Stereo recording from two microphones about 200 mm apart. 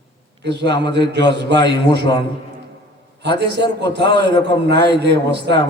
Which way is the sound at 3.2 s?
60° right (ahead or behind).